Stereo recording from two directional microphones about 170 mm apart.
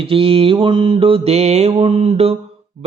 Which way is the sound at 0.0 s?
35° right (ahead or behind).